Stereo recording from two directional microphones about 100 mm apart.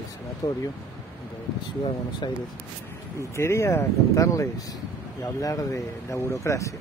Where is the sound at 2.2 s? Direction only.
50° left (ahead or behind).